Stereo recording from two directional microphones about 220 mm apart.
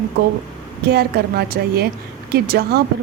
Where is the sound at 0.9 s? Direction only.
45° right (ahead or behind).